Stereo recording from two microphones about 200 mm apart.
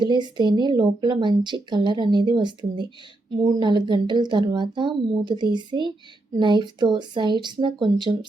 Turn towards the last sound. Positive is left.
turn(degrees=-25)  # may be behind; listen again after turning